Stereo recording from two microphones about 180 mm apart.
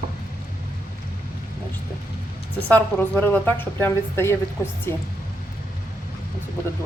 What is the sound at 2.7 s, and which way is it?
A woman's voice, 10° left (ahead or behind).